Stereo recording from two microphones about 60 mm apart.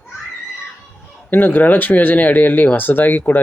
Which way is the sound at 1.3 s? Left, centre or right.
Left.